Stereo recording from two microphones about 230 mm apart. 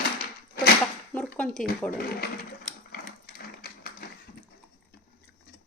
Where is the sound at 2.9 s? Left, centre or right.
Left.